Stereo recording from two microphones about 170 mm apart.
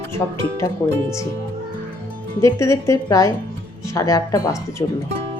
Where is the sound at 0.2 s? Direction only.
15° left (ahead or behind).